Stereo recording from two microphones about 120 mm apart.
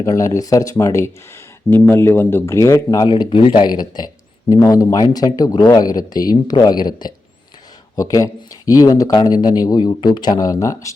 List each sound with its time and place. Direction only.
0.0 s speech: 25° left (ahead or behind)